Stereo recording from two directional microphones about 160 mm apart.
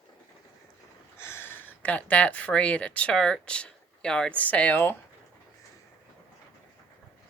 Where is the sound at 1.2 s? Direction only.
15° left (ahead or behind).